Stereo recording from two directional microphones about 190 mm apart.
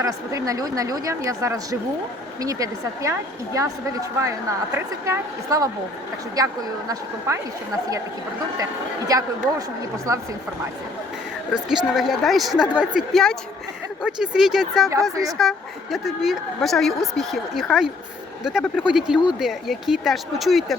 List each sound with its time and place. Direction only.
0.0 s a woman's voice: 15° right (ahead or behind)
9.0 s a woman's voice: 20° right (ahead or behind)
11.9 s speech: centre (ahead or behind)
15.1 s a woman's voice: 20° right (ahead or behind)
15.4 s speech: centre (ahead or behind)